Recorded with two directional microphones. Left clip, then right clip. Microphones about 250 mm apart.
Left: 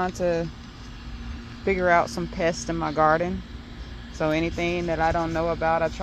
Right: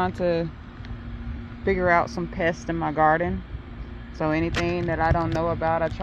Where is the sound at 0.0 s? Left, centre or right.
Centre.